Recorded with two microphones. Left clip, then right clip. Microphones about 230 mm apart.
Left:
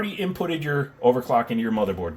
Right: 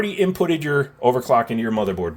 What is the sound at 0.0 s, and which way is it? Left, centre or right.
Speech, right.